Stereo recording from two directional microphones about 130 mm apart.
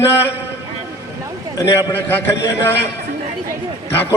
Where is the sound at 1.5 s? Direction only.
20° left (ahead or behind).